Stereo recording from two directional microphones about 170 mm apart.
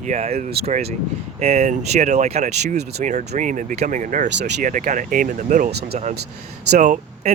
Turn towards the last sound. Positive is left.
turn(degrees=-45)  # may be behind; listen again after turning